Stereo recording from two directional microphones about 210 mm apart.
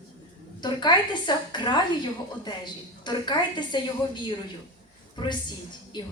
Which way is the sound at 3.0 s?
20° left (ahead or behind).